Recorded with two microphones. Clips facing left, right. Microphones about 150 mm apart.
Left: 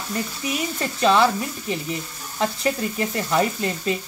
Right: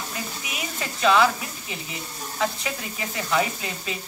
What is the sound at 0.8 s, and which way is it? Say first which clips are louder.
Sizzle: left 1 dB; 35° left (ahead or behind).